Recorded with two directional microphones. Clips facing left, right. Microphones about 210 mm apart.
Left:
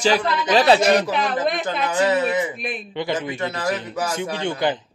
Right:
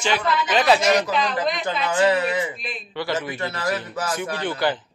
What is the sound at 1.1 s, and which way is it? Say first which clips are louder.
Speech: left 1 dB; 55° left (ahead or behind).